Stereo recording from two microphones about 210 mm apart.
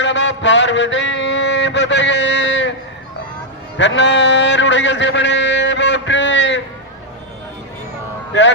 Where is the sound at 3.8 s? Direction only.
60° left (ahead or behind).